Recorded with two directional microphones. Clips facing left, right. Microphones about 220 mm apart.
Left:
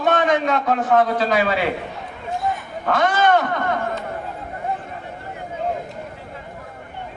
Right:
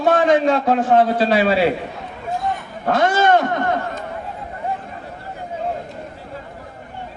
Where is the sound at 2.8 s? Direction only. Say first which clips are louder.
Right 2 dB; 30° right (ahead or behind).